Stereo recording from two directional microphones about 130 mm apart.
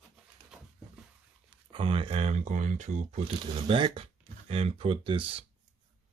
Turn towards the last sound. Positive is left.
turn(degrees=-40)  # may be behind; listen again after turning